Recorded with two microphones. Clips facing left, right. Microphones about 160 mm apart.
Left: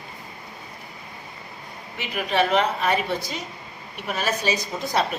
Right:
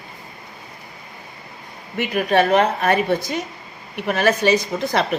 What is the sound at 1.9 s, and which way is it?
A woman's voice, 55° right (ahead or behind).